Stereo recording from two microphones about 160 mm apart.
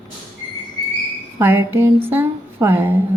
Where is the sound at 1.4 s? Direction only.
15° right (ahead or behind).